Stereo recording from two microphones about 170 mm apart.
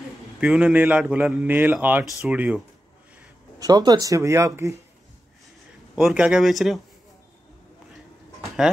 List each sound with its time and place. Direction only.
0.4 s a man's voice: 5° right (ahead or behind)
3.5 s speech: 20° right (ahead or behind)
5.9 s speech: 5° right (ahead or behind)